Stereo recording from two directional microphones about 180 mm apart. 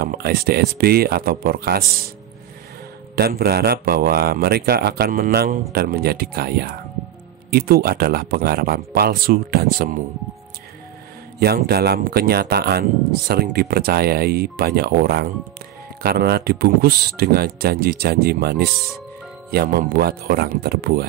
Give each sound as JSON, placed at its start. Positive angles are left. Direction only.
{"t": 0.0, "sound": "speech", "side_deg": -60}
{"t": 3.2, "sound": "speech", "side_deg": -60}
{"t": 11.3, "sound": "speech", "side_deg": -60}